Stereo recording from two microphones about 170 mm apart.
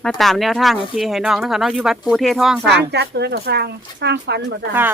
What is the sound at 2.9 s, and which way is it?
Speech, 80° right.